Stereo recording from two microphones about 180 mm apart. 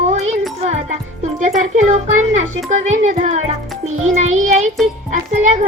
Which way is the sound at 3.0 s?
45° right (ahead or behind).